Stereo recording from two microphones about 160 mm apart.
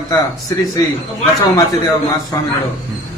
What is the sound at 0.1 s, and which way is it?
Speech, 20° left (ahead or behind).